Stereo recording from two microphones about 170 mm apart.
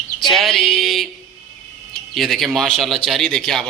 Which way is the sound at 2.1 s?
Centre (ahead or behind).